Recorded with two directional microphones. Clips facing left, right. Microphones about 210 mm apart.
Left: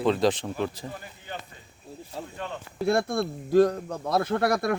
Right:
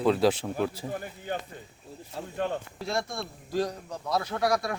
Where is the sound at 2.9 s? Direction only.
55° left (ahead or behind).